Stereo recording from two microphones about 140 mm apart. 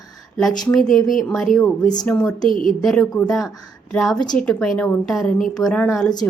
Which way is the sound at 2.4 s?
75° left (ahead or behind).